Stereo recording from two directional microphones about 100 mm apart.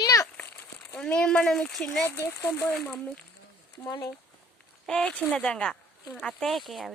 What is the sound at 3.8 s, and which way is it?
Speech, 35° left (ahead or behind).